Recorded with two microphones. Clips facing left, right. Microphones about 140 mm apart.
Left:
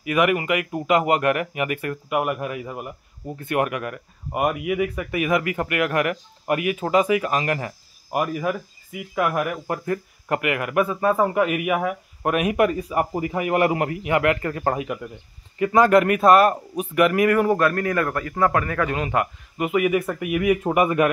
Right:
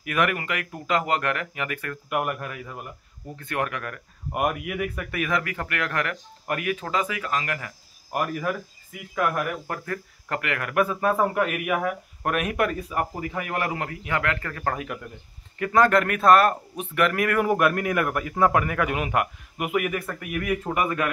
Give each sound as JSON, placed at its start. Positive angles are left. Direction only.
{"t": 0.0, "sound": "speech", "side_deg": 5}
{"t": 2.0, "sound": "speech", "side_deg": 5}
{"t": 4.3, "sound": "speech", "side_deg": 0}
{"t": 8.1, "sound": "a man's voice", "side_deg": 10}
{"t": 15.6, "sound": "speech", "side_deg": 5}
{"t": 17.5, "sound": "a man's voice", "side_deg": -15}
{"t": 19.9, "sound": "a man's voice", "side_deg": 15}